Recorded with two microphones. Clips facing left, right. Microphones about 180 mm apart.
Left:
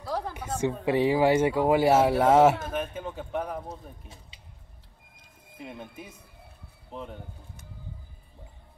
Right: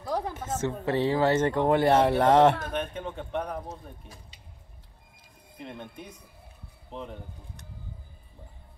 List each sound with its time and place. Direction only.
0.0 s a sound: 15° right (ahead or behind)
0.3 s a man's voice: 15° left (ahead or behind)
5.6 s speech: 5° left (ahead or behind)